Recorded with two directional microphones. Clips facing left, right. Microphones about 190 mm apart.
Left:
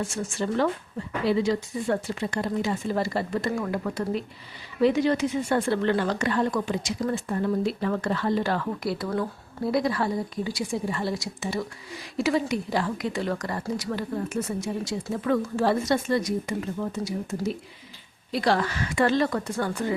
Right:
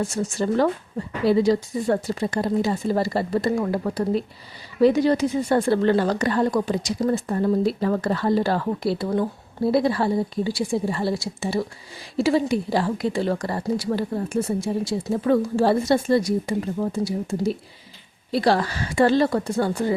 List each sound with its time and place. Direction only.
0.0 s speech: 40° right (ahead or behind)